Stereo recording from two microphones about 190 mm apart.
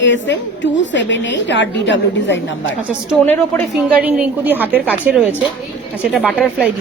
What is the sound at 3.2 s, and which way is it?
Speech, 10° left (ahead or behind).